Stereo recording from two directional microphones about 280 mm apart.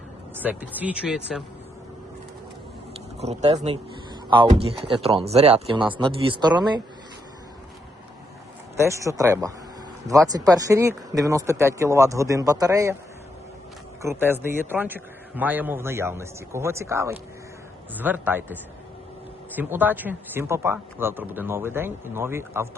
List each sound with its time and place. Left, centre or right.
0.3 s speech: centre
3.2 s a man's voice: right
8.8 s a man's voice: centre
14.0 s a man's voice: centre
19.5 s a man's voice: centre